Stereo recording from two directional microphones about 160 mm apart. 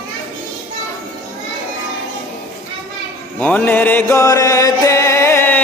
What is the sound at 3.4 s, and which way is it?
Music, 10° left (ahead or behind).